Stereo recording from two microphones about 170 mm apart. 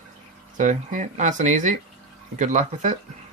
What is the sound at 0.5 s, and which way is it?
Speech, 50° right (ahead or behind).